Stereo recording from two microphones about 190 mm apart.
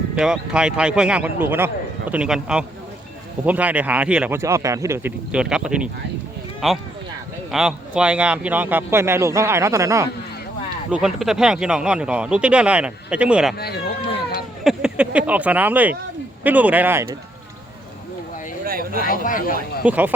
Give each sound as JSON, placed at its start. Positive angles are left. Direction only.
{"t": 0.2, "sound": "a man's voice", "side_deg": -5}
{"t": 10.9, "sound": "speech", "side_deg": 0}
{"t": 13.6, "sound": "speech", "side_deg": 55}
{"t": 14.6, "sound": "a man's voice", "side_deg": 0}
{"t": 18.6, "sound": "a sound", "side_deg": -50}
{"t": 19.0, "sound": "speech", "side_deg": 45}
{"t": 19.8, "sound": "a man's voice", "side_deg": -10}